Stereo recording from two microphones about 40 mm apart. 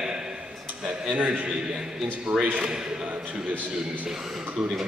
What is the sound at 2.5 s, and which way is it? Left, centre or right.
Speech, right.